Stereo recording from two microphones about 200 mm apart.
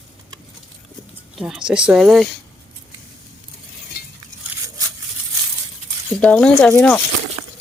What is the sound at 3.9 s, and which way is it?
Stir, 50° left (ahead or behind).